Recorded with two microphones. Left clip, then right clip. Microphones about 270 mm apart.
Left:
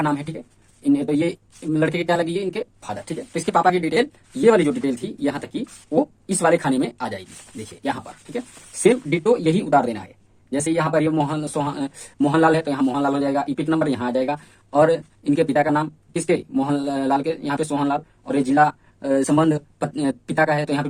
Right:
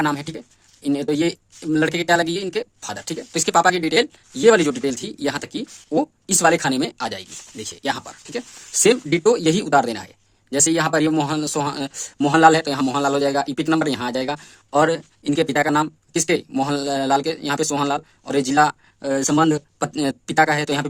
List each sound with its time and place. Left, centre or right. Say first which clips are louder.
0.0 s speech: right 1 dB; right